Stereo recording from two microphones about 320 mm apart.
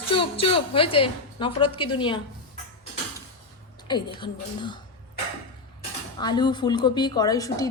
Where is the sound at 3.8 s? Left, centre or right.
Centre.